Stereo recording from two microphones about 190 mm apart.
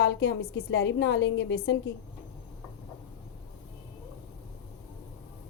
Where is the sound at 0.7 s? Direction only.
70° left (ahead or behind).